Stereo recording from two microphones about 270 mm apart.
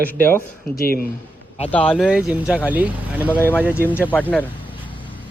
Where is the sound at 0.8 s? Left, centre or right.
Left.